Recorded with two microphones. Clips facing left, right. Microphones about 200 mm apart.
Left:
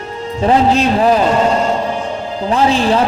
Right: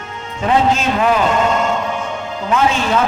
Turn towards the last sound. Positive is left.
turn(degrees=35)  # may be behind; listen again after turning